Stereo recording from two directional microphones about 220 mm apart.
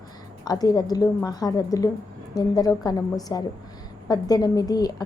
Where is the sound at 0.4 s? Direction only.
15° left (ahead or behind).